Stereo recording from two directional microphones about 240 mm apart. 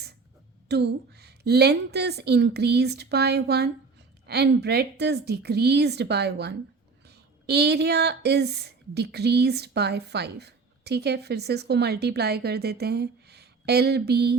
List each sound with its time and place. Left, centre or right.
0.7 s speech: right